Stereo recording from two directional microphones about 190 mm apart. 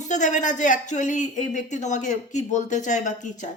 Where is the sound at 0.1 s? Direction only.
40° left (ahead or behind).